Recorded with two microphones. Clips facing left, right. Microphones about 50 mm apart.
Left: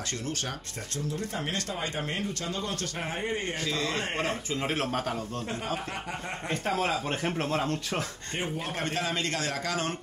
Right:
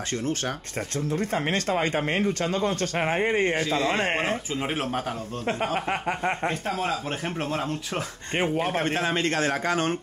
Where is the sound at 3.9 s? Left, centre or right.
Right.